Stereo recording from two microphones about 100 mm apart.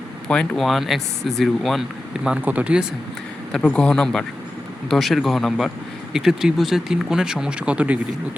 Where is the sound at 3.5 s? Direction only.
5° left (ahead or behind).